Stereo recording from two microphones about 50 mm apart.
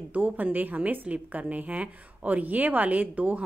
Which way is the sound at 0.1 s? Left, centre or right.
Right.